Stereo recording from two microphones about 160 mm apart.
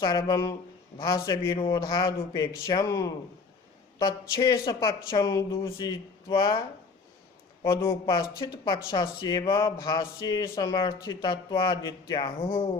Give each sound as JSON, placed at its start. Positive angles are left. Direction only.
{"t": 0.0, "sound": "speech", "side_deg": 25}
{"t": 8.0, "sound": "speech", "side_deg": 30}